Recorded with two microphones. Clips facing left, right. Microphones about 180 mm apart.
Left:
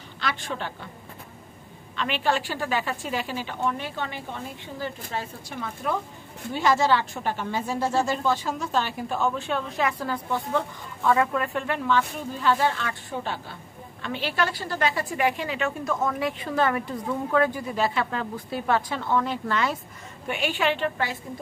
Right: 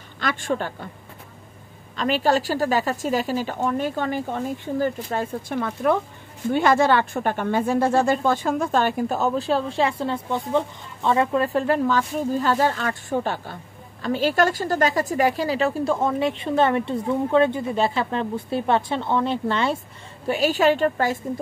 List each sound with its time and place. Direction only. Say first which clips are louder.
0.2 s a woman's voice: right 6 dB; 50° right (ahead or behind)
2.0 s a woman's voice: right 5 dB; 40° right (ahead or behind)